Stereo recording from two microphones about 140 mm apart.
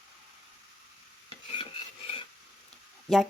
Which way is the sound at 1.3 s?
35° left (ahead or behind).